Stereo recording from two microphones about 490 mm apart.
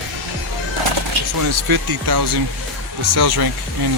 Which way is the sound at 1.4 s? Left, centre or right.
Right.